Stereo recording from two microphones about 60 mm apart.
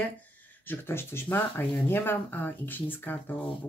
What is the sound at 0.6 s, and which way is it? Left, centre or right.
Speech, left.